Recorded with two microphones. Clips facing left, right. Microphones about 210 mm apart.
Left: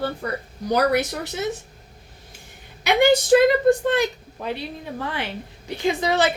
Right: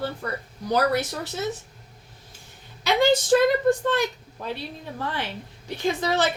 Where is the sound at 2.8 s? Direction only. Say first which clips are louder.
Left 3 dB; 15° left (ahead or behind).